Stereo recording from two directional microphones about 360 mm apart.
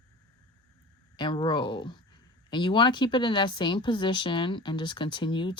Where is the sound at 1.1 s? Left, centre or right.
Centre.